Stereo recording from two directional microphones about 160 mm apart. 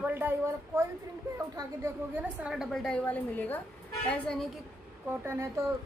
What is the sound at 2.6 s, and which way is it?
A woman's voice, 5° left (ahead or behind).